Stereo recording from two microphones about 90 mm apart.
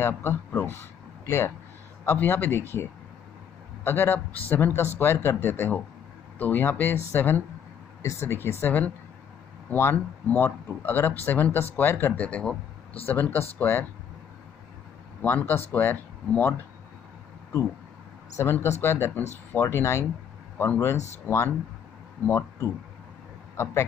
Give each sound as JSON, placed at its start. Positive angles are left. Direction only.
{"t": 0.0, "sound": "speech", "side_deg": 25}
{"t": 15.2, "sound": "speech", "side_deg": 20}
{"t": 18.4, "sound": "speech", "side_deg": 25}
{"t": 22.2, "sound": "speech", "side_deg": 20}
{"t": 23.5, "sound": "speech", "side_deg": 30}